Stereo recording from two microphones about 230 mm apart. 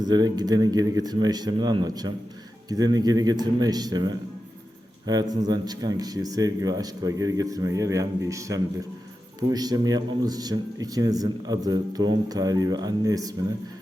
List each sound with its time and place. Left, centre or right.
0.0 s a man's voice: centre